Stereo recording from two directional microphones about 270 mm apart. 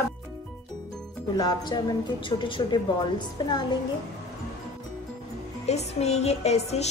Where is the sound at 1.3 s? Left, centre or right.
Centre.